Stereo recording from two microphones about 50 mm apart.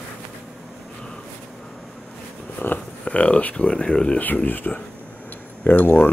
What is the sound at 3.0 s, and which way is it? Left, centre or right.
Speech, left.